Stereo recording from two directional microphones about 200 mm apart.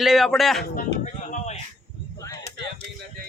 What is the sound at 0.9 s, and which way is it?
Speech, 60° left (ahead or behind).